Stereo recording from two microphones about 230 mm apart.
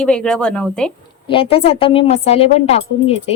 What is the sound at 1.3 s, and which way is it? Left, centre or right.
A woman's voice, left.